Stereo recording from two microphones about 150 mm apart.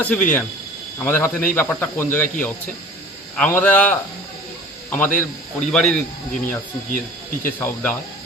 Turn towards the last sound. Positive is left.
turn(degrees=10)  # may be behind; listen again after turning